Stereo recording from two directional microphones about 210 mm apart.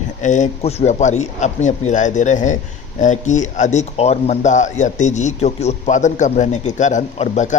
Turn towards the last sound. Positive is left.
turn(degrees=35)  # may be behind; listen again after turning